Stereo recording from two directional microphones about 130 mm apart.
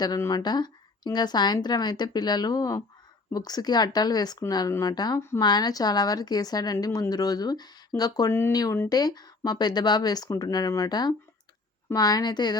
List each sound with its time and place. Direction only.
0.0 s a woman's voice: 30° left (ahead or behind)
8.3 s a woman's voice: 20° left (ahead or behind); by 12.5 s 35° left (ahead or behind)